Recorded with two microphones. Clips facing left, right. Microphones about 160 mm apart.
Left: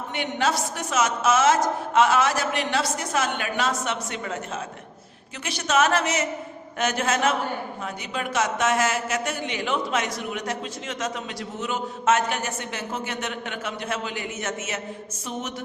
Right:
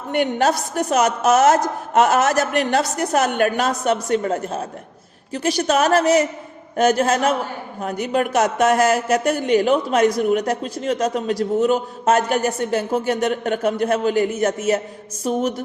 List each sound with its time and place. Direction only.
0.1 s a woman's voice: 45° right (ahead or behind)